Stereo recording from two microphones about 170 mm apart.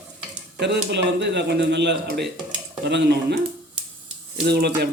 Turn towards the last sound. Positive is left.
turn(degrees=-70)  # may be behind; listen again after turning